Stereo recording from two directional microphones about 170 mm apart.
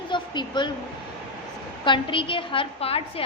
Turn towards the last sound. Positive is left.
turn(degrees=35)  # may be behind; listen again after turning